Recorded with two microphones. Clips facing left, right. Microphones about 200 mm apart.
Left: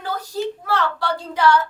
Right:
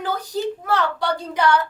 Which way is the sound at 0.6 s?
20° right (ahead or behind).